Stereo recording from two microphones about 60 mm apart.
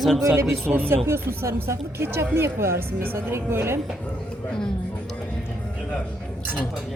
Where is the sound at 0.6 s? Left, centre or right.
Right.